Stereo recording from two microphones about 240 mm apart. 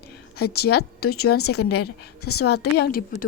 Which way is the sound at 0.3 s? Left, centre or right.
Left.